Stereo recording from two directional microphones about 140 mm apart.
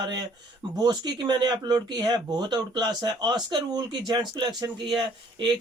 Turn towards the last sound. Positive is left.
turn(degrees=-35)  # may be behind; listen again after turning